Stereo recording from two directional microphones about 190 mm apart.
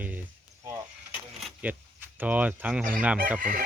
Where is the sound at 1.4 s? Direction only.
5° right (ahead or behind).